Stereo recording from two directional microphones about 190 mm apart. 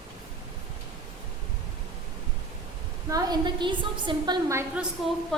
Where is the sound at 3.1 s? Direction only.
20° right (ahead or behind).